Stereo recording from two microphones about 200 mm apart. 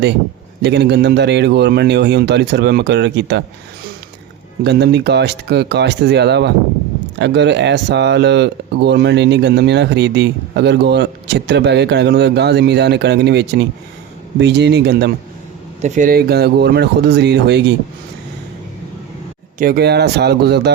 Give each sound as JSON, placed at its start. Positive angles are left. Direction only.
{"t": 0.6, "sound": "speech", "side_deg": -60}
{"t": 4.6, "sound": "speech", "side_deg": -55}
{"t": 15.8, "sound": "speech", "side_deg": -40}
{"t": 19.5, "sound": "speech", "side_deg": -50}